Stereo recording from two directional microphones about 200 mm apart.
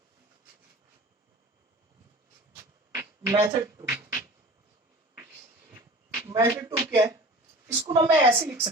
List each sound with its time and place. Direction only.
2.9 s a sound: 15° right (ahead or behind)
6.1 s a woman's voice: 15° right (ahead or behind)
8.3 s a woman's voice: 10° right (ahead or behind)